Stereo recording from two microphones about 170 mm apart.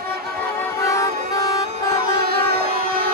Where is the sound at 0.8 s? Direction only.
20° left (ahead or behind).